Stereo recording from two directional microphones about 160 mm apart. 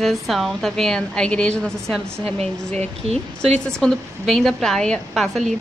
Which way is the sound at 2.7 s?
40° right (ahead or behind).